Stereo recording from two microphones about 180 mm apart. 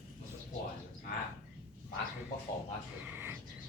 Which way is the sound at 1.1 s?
50° left (ahead or behind).